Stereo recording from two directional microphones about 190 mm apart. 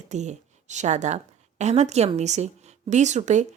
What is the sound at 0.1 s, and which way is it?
A woman's voice, 40° right (ahead or behind).